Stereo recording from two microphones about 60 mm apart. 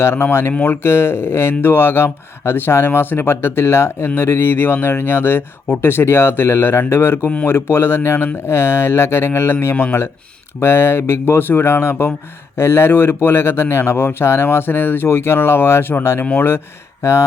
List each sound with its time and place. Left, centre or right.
0.0 s speech: left
17.0 s speech: left